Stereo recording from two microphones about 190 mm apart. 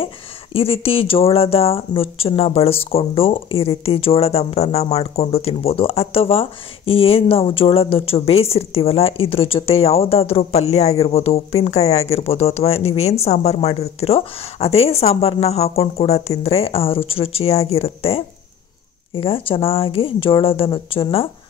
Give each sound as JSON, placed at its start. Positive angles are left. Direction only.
{"t": 0.0, "sound": "speech", "side_deg": 30}